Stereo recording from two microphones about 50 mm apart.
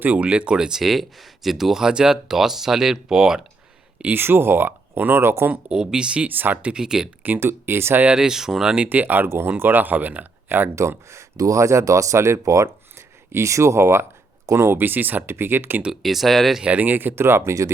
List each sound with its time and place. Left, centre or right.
0.0 s speech: right; by 3.4 s centre
4.1 s speech: right
5.6 s speech: centre
6.2 s speech: right
6.7 s speech: centre
7.3 s speech: right
8.1 s speech: centre
8.7 s speech: right
10.8 s speech: right
14.5 s speech: right
15.9 s speech: centre
16.6 s speech: right